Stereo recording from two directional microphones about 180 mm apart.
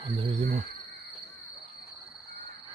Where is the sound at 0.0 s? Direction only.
30° right (ahead or behind).